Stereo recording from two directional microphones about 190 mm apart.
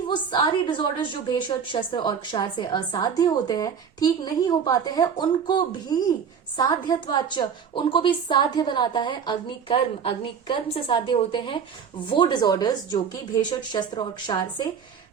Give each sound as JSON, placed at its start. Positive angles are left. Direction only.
{"t": 0.1, "sound": "a woman's voice", "side_deg": 25}